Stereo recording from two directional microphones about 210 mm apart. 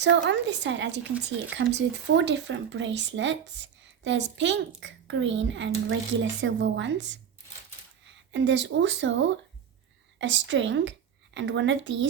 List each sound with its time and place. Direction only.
0.0 s speech: 55° right (ahead or behind)